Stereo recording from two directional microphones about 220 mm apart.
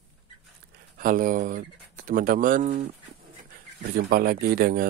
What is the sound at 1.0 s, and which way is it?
Speech, 40° right (ahead or behind).